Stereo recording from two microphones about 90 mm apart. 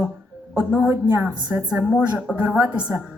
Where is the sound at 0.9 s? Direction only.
30° right (ahead or behind).